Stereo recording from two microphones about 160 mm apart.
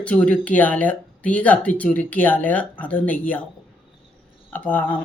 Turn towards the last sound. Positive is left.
turn(degrees=10)  # may be behind; listen again after turning